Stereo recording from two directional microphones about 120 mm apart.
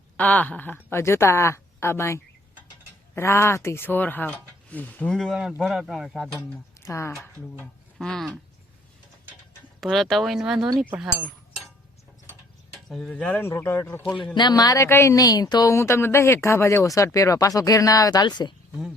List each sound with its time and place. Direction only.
0.2 s speech: 10° left (ahead or behind)
5.3 s speech: 5° right (ahead or behind)
6.8 s speech: 25° left (ahead or behind)
7.9 s speech: 5° left (ahead or behind)
9.8 s speech: centre (ahead or behind)
12.7 s speech: centre (ahead or behind)
13.4 s speech: 20° left (ahead or behind)
14.3 s speech: 35° left (ahead or behind)
15.7 s speech: 20° left (ahead or behind); by 18.5 s 40° left (ahead or behind)